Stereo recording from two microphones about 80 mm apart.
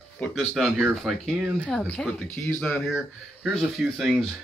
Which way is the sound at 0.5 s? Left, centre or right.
Centre.